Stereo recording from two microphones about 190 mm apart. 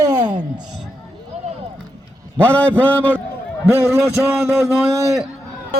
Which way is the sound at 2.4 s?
5° left (ahead or behind).